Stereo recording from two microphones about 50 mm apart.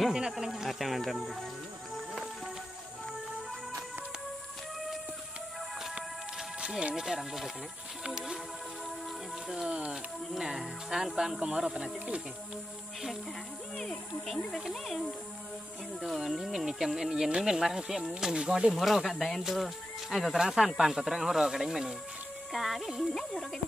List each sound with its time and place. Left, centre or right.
0.1 s speech: centre
0.5 s speech: centre
6.6 s speech: centre
8.0 s music: centre
9.7 s speech: right
10.3 s speech: centre
13.7 s speech: centre
16.3 s speech: centre
18.3 s speech: centre
18.7 s speech: centre